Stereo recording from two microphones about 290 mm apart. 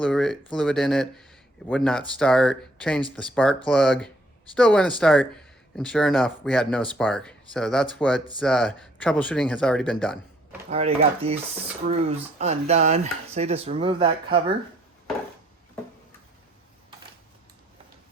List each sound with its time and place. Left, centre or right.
0.0 s speech: centre
10.7 s speech: right